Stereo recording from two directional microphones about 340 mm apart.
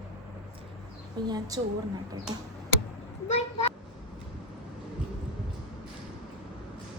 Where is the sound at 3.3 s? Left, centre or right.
Centre.